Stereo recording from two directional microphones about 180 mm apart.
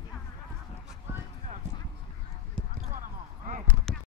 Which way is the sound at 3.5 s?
50° right (ahead or behind).